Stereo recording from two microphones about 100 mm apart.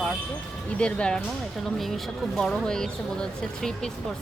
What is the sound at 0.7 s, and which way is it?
Speech, 10° left (ahead or behind).